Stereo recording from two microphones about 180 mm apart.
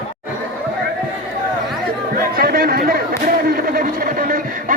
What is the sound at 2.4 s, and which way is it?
Chatter, 55° right (ahead or behind).